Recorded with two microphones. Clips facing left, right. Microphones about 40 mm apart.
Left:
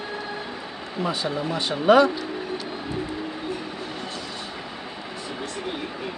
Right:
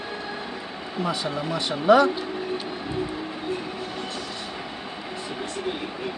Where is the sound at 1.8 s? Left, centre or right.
Left.